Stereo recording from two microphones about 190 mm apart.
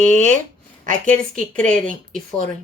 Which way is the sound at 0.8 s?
45° right (ahead or behind).